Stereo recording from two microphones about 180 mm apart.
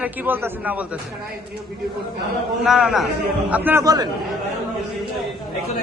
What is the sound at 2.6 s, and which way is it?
A man's voice, 5° right (ahead or behind).